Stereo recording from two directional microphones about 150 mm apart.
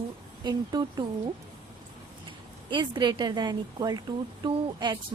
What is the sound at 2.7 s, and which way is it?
A woman's voice, 30° right (ahead or behind).